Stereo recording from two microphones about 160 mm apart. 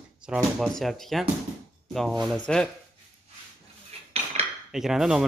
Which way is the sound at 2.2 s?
5° left (ahead or behind).